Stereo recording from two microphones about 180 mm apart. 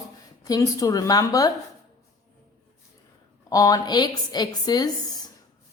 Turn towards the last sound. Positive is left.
turn(degrees=20)  # may be behind; listen again after turning